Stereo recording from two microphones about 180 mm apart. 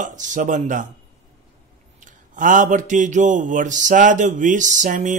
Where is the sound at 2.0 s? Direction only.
45° right (ahead or behind).